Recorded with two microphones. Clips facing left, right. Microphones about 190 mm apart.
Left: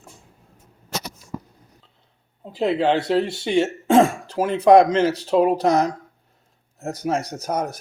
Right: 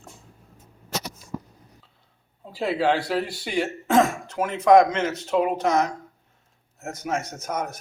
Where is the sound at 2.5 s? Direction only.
20° left (ahead or behind).